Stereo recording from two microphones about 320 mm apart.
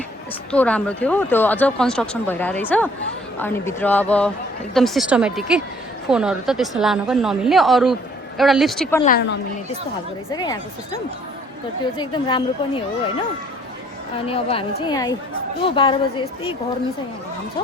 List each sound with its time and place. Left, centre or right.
0.5 s speech: centre
9.0 s a woman's voice: left
10.3 s a woman's voice: centre
11.9 s a woman's voice: centre
14.3 s a woman's voice: centre